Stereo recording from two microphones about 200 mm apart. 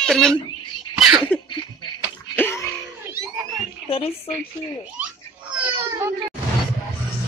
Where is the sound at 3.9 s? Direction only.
30° left (ahead or behind).